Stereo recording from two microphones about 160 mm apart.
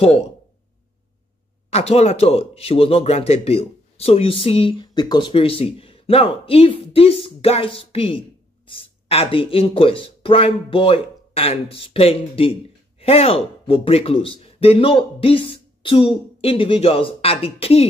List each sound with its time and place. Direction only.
0.0 s speech: 40° left (ahead or behind)
1.7 s speech: 40° left (ahead or behind)